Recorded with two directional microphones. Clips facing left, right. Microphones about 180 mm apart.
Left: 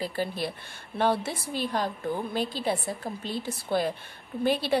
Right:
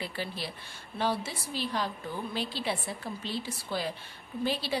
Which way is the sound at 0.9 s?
55° left (ahead or behind).